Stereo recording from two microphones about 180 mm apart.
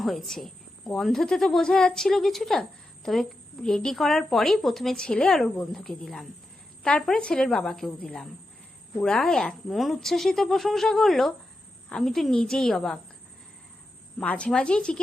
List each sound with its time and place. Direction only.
0.0 s speech: centre (ahead or behind)
14.2 s speech: 5° left (ahead or behind)